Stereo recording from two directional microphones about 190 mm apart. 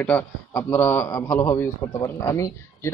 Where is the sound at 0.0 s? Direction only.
10° left (ahead or behind).